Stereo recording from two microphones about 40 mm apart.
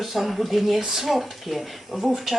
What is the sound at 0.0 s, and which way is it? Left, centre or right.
Speech, centre.